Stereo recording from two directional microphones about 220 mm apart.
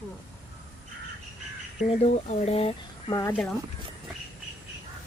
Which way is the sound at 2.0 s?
30° left (ahead or behind).